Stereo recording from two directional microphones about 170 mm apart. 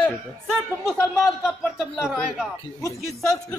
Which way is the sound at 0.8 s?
Centre (ahead or behind).